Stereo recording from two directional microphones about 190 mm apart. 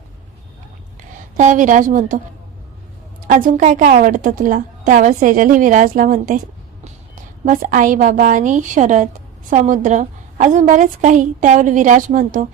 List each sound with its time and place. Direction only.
1.4 s a woman's voice: 40° right (ahead or behind)
3.2 s a woman's voice: 45° right (ahead or behind)
7.4 s a woman's voice: 45° right (ahead or behind)